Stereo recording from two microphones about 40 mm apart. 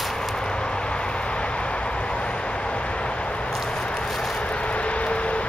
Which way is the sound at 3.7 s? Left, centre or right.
Left.